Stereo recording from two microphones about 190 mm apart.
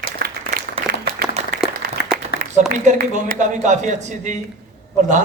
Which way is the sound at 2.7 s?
40° right (ahead or behind).